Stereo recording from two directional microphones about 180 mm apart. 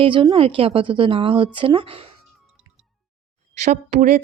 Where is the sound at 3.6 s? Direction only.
40° right (ahead or behind).